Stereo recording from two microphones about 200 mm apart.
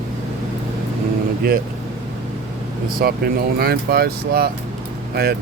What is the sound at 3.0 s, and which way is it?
Speech, 50° right (ahead or behind).